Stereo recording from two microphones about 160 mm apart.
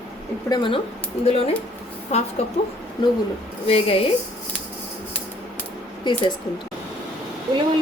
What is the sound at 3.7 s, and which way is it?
Speech, 35° left (ahead or behind).